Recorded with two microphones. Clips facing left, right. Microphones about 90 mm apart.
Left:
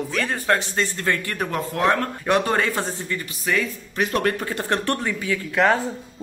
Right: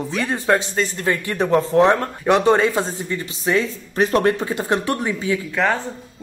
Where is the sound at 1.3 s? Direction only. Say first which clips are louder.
Right 9 dB; 25° right (ahead or behind).